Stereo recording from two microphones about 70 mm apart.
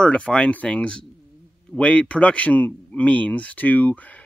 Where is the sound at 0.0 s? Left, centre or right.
Centre.